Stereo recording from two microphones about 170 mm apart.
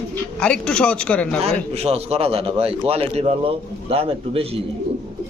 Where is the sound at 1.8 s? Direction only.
35° right (ahead or behind).